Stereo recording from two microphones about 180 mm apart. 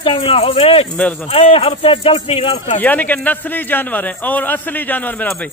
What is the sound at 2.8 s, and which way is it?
A man's voice, 10° left (ahead or behind).